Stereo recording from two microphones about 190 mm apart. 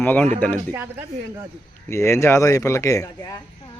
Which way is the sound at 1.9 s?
15° left (ahead or behind).